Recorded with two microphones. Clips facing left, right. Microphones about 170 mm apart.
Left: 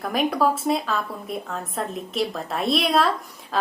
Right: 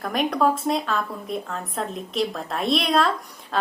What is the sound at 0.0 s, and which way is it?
Speech, centre (ahead or behind).